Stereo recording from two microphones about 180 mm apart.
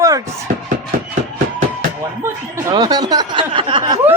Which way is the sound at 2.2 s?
20° right (ahead or behind).